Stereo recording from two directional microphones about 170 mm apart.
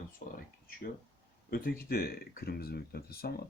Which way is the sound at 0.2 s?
45° left (ahead or behind).